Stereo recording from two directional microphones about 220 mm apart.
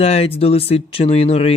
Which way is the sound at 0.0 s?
30° left (ahead or behind).